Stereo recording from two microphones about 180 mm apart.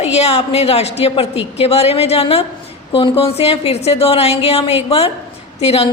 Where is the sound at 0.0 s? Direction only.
35° left (ahead or behind).